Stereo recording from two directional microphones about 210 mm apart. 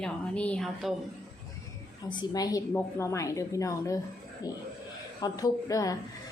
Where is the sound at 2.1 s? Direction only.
20° left (ahead or behind).